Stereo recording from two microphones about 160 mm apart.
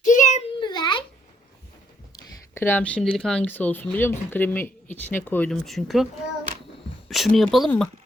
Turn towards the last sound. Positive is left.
turn(degrees=0)  # may be behind; listen again after turning